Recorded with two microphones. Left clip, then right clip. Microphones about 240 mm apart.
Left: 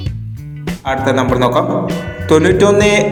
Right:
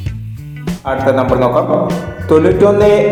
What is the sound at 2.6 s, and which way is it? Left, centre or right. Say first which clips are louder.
Music: right 2 dB; left.